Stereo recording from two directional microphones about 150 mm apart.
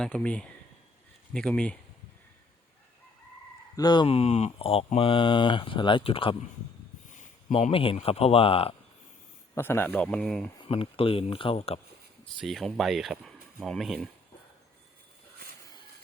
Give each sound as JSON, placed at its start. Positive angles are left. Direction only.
{"t": 0.0, "sound": "speech", "side_deg": 5}
{"t": 3.8, "sound": "speech", "side_deg": 30}
{"t": 4.1, "sound": "speech", "side_deg": 45}
{"t": 7.7, "sound": "speech", "side_deg": 40}
{"t": 9.6, "sound": "speech", "side_deg": 15}
{"t": 10.7, "sound": "speech", "side_deg": 40}
{"t": 12.2, "sound": "speech", "side_deg": 0}